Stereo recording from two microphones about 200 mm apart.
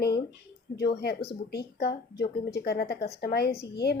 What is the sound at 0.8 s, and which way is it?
Speech, 55° left (ahead or behind).